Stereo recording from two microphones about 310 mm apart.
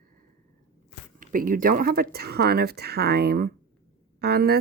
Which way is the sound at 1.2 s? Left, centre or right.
Right.